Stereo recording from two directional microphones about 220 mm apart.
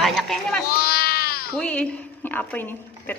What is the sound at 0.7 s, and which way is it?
Cat, 45° left (ahead or behind).